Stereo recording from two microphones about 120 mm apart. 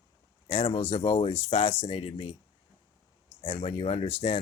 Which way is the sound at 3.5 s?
45° left (ahead or behind).